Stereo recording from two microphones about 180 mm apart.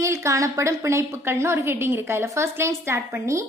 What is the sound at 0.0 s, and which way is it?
A woman's voice, 15° right (ahead or behind).